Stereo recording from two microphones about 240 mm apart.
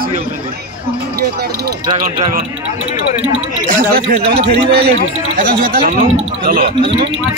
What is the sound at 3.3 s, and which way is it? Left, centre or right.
Speech, right.